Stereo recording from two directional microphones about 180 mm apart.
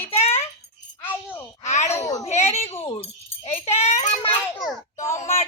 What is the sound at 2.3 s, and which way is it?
A woman's voice, 35° left (ahead or behind).